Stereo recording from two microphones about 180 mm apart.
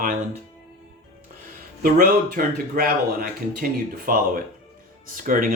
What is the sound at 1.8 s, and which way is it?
Speech, 50° right (ahead or behind).